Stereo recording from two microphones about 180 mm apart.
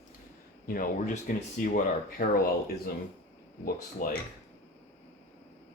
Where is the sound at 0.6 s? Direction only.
50° left (ahead or behind).